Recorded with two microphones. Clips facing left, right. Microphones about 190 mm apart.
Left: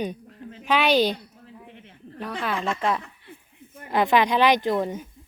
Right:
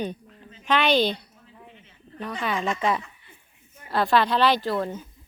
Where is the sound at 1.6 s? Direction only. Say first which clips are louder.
Left 5 dB; 65° left (ahead or behind).